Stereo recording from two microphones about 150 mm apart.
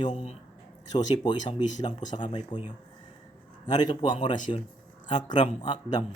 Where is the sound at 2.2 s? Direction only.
35° left (ahead or behind).